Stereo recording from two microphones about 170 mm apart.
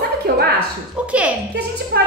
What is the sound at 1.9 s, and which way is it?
Speech, 70° right (ahead or behind).